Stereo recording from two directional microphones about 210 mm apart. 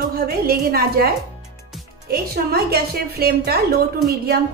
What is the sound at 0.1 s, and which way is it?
A woman's voice, 45° right (ahead or behind).